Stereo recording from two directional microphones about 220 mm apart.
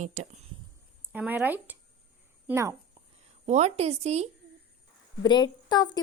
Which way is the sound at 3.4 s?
30° right (ahead or behind).